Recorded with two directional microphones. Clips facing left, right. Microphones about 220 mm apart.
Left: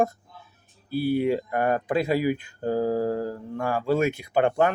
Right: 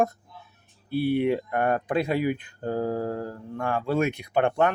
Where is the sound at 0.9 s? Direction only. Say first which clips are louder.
Even; 65° right (ahead or behind).